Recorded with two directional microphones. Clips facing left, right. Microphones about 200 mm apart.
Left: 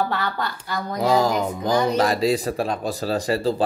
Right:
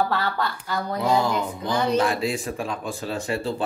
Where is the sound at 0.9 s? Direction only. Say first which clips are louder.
Left 3 dB; 40° left (ahead or behind).